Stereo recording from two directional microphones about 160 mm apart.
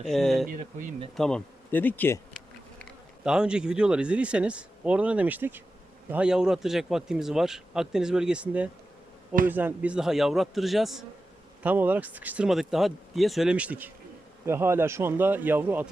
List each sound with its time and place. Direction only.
0.0 s a man's voice: centre (ahead or behind)
0.4 s speech: 55° right (ahead or behind)
1.1 s bee: 5° left (ahead or behind)
3.2 s a man's voice: 5° right (ahead or behind)